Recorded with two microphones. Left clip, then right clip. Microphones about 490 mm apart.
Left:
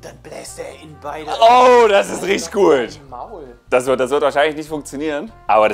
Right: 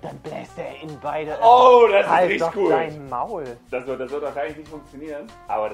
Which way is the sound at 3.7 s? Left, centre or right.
Left.